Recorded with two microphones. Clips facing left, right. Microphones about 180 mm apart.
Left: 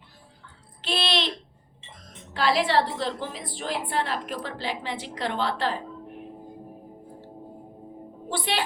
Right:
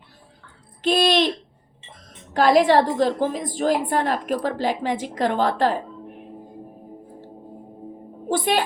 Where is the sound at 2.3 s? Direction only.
45° right (ahead or behind).